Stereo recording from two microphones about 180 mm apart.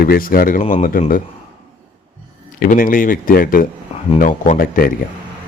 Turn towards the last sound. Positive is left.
turn(degrees=55)  # may be behind; listen again after turning